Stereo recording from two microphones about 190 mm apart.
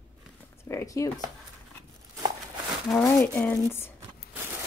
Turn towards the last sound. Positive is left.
turn(degrees=10)  # may be behind; listen again after turning